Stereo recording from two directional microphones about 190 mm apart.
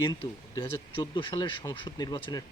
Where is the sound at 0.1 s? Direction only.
20° left (ahead or behind).